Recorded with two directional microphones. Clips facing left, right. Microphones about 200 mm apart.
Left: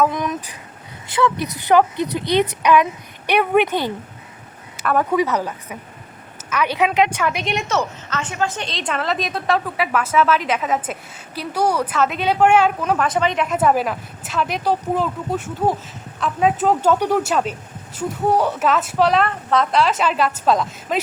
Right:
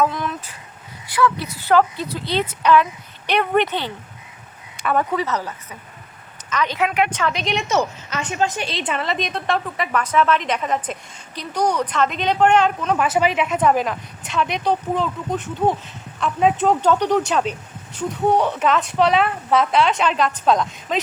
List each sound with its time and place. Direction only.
0.0 s a sound: 15° left (ahead or behind)
1.0 s a woman's voice: 25° left (ahead or behind)
8.1 s a woman's voice: 15° right (ahead or behind); by 13.0 s 10° left (ahead or behind)
13.0 s a woman's voice: 5° right (ahead or behind)